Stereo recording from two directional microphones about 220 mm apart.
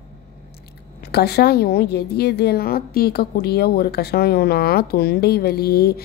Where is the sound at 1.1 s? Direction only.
45° left (ahead or behind).